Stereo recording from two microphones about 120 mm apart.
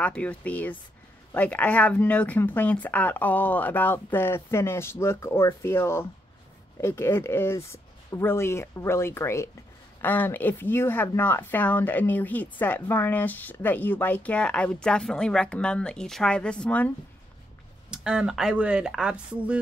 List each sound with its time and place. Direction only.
0.0 s speech: 10° left (ahead or behind)
17.8 s speech: 5° right (ahead or behind)